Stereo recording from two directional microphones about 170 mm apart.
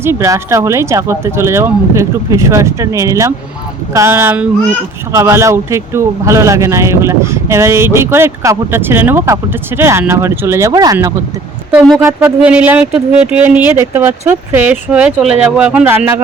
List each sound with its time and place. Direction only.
0.0 s speech: 15° right (ahead or behind)
12.0 s speech: 10° right (ahead or behind)